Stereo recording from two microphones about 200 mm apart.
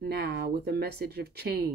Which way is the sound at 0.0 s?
55° right (ahead or behind).